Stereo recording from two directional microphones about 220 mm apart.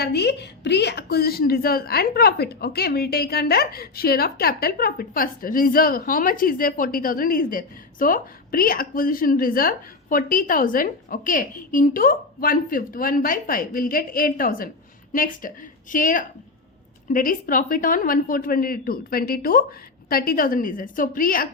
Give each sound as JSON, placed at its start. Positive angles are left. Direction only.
{"t": 0.0, "sound": "a woman's voice", "side_deg": 50}